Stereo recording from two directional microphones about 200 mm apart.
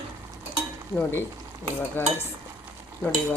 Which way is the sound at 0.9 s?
10° left (ahead or behind).